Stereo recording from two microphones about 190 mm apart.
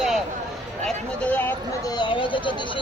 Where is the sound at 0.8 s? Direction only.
10° left (ahead or behind).